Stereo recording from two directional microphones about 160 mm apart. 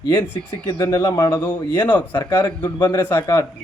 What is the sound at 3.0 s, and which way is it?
Speech, 15° left (ahead or behind).